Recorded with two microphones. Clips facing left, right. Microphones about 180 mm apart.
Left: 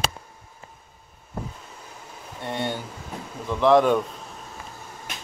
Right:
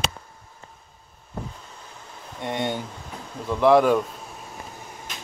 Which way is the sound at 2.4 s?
15° right (ahead or behind).